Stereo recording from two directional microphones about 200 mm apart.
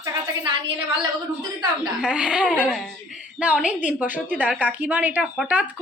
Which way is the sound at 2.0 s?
5° right (ahead or behind).